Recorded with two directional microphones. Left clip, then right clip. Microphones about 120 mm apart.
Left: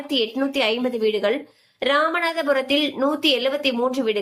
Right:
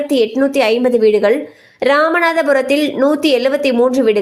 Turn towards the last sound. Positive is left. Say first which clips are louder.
# right 9 dB
turn(degrees=-50)  # may be behind; listen again after turning